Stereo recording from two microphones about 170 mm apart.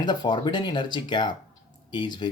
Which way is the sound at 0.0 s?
25° left (ahead or behind).